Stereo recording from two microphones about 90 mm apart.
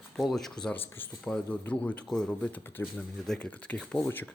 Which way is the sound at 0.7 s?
25° left (ahead or behind).